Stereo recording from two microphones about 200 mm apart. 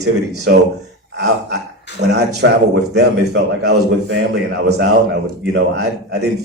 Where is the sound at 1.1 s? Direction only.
55° right (ahead or behind).